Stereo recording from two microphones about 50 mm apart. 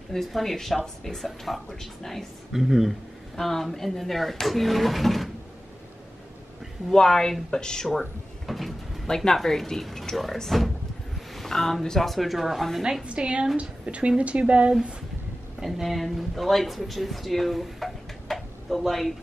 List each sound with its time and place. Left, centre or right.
0.1 s speech: centre
2.5 s speech: centre
3.3 s speech: centre
6.9 s a woman's voice: centre
13.0 s speech: right
15.6 s speech: centre